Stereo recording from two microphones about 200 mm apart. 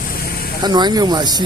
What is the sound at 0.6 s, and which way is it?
Speech, 20° right (ahead or behind).